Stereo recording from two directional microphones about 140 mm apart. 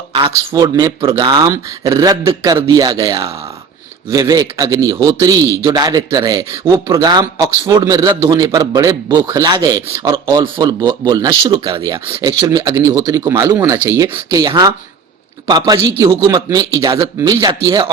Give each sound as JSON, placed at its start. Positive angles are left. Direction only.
{"t": 0.1, "sound": "speech", "side_deg": -40}
{"t": 0.5, "sound": "a man's voice", "side_deg": -25}